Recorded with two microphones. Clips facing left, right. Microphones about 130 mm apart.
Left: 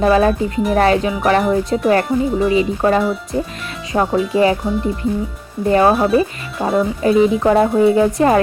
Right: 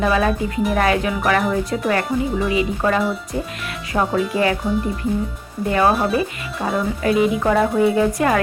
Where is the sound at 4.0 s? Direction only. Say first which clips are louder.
Left 4 dB; centre (ahead or behind).